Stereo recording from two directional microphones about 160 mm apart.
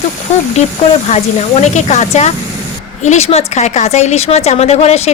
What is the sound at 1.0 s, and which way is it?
A woman's voice, 40° left (ahead or behind).